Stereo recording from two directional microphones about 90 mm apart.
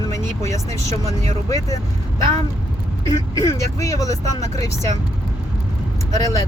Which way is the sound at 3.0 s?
45° left (ahead or behind).